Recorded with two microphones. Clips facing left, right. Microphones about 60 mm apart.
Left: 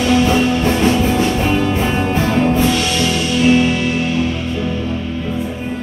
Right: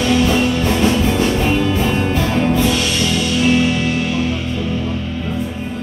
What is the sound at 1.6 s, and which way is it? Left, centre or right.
Music, left.